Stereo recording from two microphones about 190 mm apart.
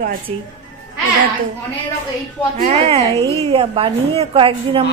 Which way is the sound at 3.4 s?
30° right (ahead or behind).